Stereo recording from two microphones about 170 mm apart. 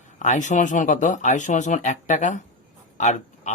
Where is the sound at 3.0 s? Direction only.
45° left (ahead or behind).